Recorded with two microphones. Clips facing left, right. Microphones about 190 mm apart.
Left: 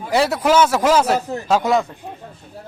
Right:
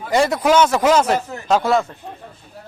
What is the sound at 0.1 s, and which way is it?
A man's voice, 5° left (ahead or behind).